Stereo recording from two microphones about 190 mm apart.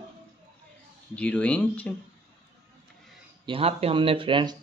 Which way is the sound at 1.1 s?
5° left (ahead or behind).